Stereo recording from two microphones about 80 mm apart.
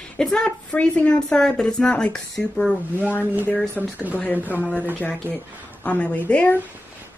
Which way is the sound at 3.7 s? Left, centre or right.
Right.